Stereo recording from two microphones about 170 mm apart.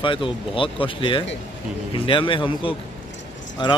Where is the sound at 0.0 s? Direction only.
30° left (ahead or behind).